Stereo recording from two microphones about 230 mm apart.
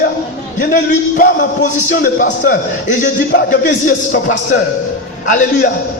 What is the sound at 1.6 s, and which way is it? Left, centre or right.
A man's voice, left.